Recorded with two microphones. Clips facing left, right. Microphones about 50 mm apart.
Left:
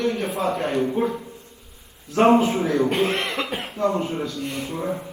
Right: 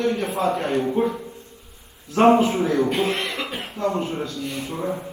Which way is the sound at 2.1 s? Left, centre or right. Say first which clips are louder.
Right 1 dB; right.